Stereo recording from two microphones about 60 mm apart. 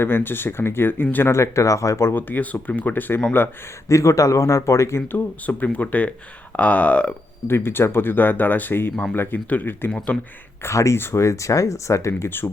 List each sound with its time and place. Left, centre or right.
0.0 s speech: left
1.3 s speech: left
2.1 s speech: left
3.8 s speech: left
5.1 s speech: left
7.4 s speech: left
10.6 s speech: left